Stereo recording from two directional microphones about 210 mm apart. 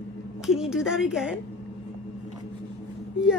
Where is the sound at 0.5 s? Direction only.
Centre (ahead or behind).